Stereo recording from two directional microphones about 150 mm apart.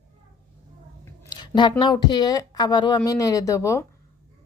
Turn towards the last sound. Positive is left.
turn(degrees=20)  # may be behind; listen again after turning